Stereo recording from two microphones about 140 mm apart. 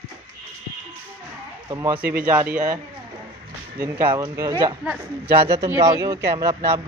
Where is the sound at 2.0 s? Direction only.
90° right.